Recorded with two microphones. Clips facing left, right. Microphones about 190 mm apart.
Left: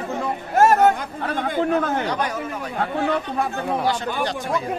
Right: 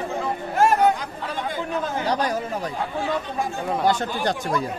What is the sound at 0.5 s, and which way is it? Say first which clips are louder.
Speech: left 3 dB; 45° left (ahead or behind).